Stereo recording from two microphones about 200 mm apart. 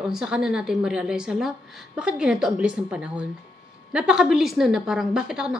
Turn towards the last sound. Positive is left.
turn(degrees=-5)  # may be behind; listen again after turning